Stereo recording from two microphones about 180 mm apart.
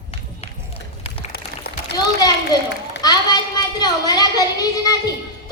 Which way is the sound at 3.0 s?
20° left (ahead or behind).